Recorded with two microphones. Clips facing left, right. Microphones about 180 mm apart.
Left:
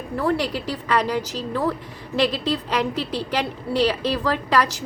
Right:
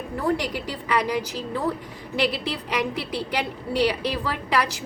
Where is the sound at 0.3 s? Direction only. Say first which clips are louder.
Left 2 dB; 15° right (ahead or behind).